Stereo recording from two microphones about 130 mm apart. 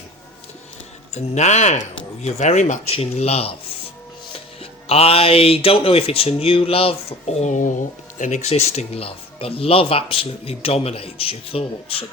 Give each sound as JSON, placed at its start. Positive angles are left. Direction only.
{"t": 1.1, "sound": "speech", "side_deg": 60}
{"t": 2.9, "sound": "speech", "side_deg": 50}
{"t": 4.6, "sound": "speech", "side_deg": 50}